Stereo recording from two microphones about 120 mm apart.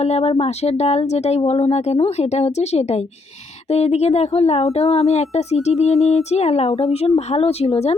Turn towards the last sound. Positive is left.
turn(degrees=60)  # may be behind; listen again after turning